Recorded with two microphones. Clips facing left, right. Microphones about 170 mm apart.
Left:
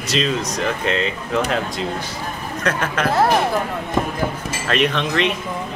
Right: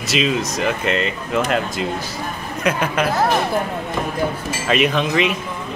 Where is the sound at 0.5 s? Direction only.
5° right (ahead or behind).